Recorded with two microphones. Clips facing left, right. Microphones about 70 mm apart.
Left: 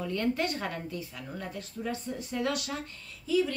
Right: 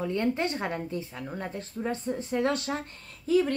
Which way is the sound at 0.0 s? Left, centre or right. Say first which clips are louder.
Right 2 dB; right.